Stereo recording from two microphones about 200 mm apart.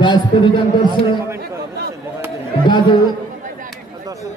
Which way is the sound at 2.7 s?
25° left (ahead or behind).